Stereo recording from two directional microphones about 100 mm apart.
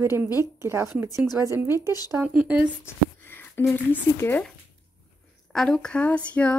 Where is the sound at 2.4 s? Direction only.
10° right (ahead or behind).